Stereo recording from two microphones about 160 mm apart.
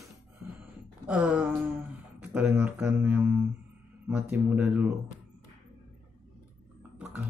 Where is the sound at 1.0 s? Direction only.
10° right (ahead or behind).